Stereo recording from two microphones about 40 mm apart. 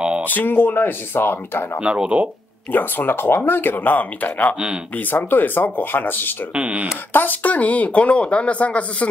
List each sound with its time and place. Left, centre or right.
0.2 s speech: left
1.8 s speech: right
2.7 s speech: left
5.1 s speech: left
6.5 s speech: right
7.1 s speech: left
7.4 s speech: left